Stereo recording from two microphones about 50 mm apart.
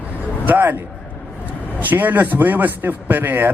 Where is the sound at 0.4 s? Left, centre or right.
Right.